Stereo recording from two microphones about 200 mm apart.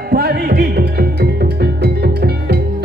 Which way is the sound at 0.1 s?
50° right (ahead or behind).